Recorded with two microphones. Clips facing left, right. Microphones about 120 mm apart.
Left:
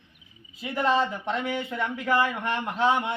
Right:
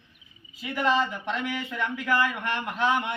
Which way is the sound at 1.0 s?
30° left (ahead or behind).